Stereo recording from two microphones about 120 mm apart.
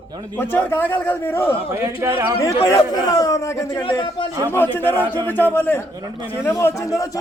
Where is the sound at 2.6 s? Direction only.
30° left (ahead or behind).